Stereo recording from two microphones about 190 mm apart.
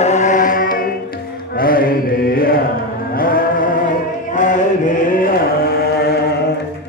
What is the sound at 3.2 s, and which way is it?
Chant, 50° left (ahead or behind).